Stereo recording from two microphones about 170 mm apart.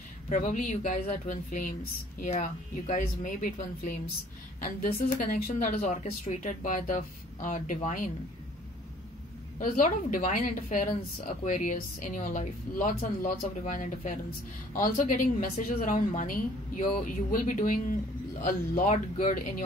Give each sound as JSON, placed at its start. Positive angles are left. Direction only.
{"t": 0.3, "sound": "speech", "side_deg": 50}
{"t": 4.6, "sound": "speech", "side_deg": 55}
{"t": 9.6, "sound": "speech", "side_deg": 50}